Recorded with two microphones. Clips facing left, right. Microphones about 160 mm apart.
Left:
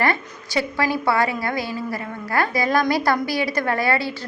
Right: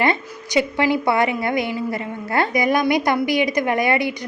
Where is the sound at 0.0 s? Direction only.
20° right (ahead or behind).